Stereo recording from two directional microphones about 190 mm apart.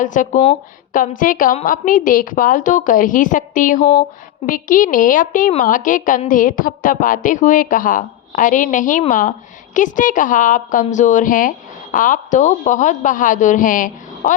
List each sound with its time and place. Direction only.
0.0 s a woman's voice: 45° left (ahead or behind)